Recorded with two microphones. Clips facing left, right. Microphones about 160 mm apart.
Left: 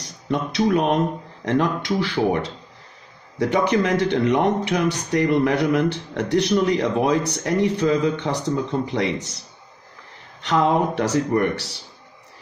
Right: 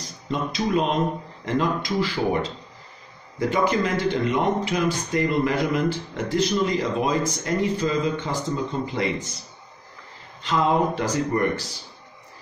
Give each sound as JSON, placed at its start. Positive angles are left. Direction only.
{"t": 0.3, "sound": "speech", "side_deg": 70}
{"t": 10.4, "sound": "speech", "side_deg": 75}